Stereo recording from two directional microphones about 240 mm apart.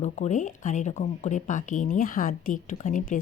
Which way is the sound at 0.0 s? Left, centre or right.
Left.